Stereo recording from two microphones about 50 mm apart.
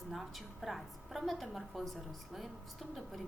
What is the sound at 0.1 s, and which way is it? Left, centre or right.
A woman's voice, centre.